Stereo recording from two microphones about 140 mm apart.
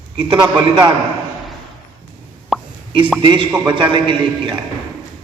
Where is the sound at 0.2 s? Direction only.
30° right (ahead or behind).